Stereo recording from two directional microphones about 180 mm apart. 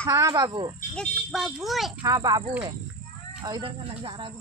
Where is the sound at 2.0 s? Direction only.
20° right (ahead or behind).